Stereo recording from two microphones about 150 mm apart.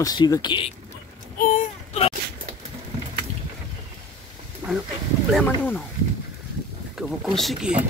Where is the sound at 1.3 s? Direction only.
60° left (ahead or behind).